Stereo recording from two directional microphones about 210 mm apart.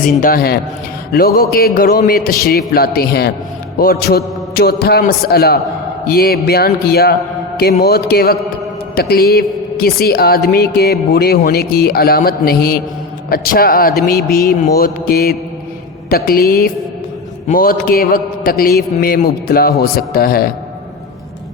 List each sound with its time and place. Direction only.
0.2 s a man's voice: 45° left (ahead or behind)